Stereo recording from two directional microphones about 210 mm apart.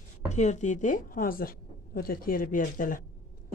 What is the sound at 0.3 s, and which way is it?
A woman's voice, 35° left (ahead or behind).